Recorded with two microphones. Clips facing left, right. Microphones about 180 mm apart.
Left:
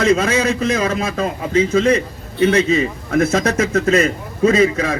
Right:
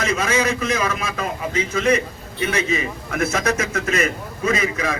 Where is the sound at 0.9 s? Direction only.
30° left (ahead or behind).